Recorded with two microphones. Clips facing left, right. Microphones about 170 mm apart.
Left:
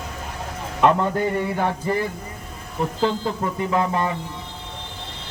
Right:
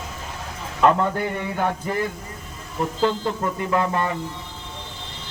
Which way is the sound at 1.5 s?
Centre (ahead or behind).